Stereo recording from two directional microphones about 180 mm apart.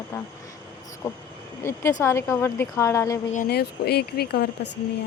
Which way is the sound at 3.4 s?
60° left (ahead or behind).